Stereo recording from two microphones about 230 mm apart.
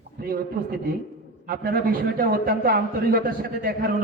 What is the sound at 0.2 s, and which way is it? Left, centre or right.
Speech, right.